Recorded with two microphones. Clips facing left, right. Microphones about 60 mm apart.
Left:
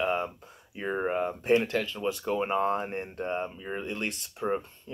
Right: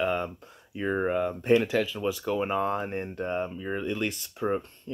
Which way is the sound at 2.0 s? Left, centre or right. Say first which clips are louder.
Right 1 dB; centre.